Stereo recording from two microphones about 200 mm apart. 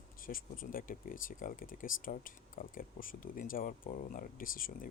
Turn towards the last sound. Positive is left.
turn(degrees=45)  # may be behind; listen again after turning